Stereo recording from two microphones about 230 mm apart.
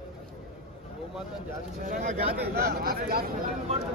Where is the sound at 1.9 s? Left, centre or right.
Right.